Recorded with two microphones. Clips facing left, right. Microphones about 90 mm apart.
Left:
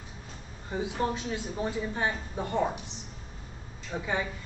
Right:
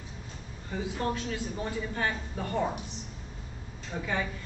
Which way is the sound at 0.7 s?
20° left (ahead or behind).